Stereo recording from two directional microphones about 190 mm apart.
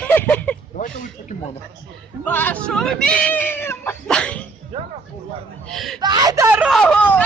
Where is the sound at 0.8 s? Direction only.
40° left (ahead or behind).